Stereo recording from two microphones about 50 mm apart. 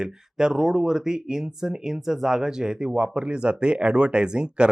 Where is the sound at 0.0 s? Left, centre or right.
Centre.